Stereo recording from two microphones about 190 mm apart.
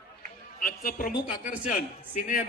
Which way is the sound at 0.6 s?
50° left (ahead or behind).